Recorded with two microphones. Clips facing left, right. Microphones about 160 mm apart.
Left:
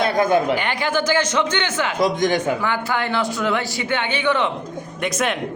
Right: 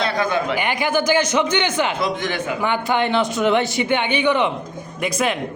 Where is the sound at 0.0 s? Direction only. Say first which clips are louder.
Left 3 dB; 50° left (ahead or behind).